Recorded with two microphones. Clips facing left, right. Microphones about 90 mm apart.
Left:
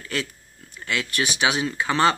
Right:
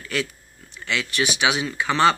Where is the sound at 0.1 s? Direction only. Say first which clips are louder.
Right 2 dB; 35° left (ahead or behind).